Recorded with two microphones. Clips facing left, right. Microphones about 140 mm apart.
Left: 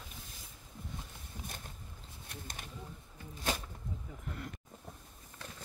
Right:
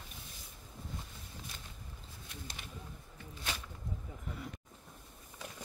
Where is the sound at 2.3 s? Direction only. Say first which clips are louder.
Left 2 dB; 50° left (ahead or behind).